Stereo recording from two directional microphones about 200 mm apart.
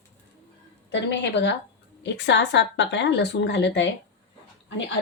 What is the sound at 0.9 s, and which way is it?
A woman's voice, 60° left (ahead or behind).